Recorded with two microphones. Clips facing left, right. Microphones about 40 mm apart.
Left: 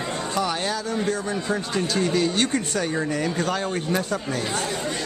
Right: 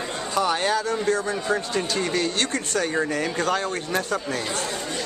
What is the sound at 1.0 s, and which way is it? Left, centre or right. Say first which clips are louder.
A man's voice: right 2 dB; centre.